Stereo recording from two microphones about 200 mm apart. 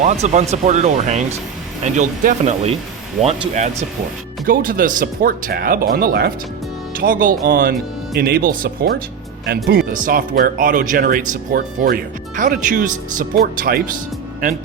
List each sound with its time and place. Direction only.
0.0 s speech: 35° right (ahead or behind)